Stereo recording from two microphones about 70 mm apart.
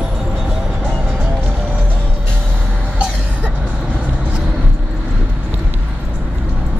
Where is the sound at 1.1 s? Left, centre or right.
Right.